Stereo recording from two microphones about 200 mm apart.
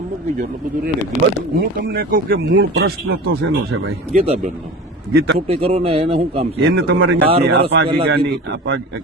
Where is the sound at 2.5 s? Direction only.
80° right.